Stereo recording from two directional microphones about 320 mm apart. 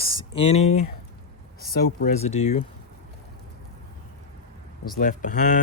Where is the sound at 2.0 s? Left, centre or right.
Centre.